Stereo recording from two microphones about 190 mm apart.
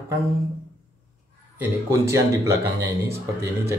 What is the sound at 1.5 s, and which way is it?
A man's voice, 15° right (ahead or behind).